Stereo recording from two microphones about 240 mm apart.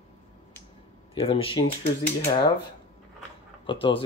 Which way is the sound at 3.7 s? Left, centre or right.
Left.